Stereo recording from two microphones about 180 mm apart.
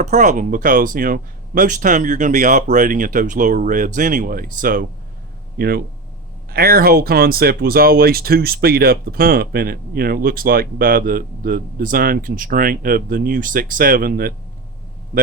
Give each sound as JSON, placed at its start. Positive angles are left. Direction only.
{"t": 0.0, "sound": "speech", "side_deg": -45}